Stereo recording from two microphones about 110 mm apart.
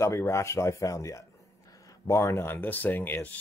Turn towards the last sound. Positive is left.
turn(degrees=20)  # may be behind; listen again after turning